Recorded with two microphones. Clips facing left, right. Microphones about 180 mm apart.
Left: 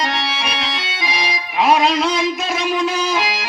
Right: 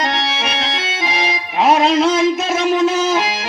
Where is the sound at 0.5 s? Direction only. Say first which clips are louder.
Right 2 dB; 25° right (ahead or behind).